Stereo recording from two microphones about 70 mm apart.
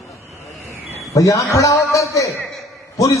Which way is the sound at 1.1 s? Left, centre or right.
Left.